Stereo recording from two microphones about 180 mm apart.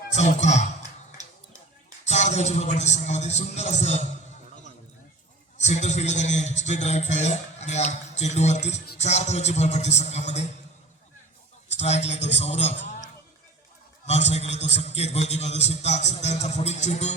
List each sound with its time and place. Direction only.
0.1 s a man's voice: 40° left (ahead or behind)
2.0 s a man's voice: 40° left (ahead or behind)
5.5 s a man's voice: 40° left (ahead or behind)
11.7 s a man's voice: 40° left (ahead or behind)
14.1 s a man's voice: 40° left (ahead or behind)